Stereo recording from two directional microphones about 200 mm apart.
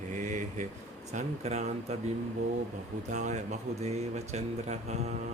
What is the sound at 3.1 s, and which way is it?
Speech, 35° right (ahead or behind).